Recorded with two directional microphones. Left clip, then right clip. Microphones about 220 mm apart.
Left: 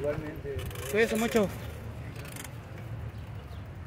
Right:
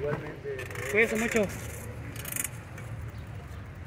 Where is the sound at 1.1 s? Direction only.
15° left (ahead or behind).